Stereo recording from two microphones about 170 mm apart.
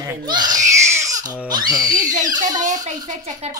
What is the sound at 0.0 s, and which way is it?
Crying, 25° right (ahead or behind).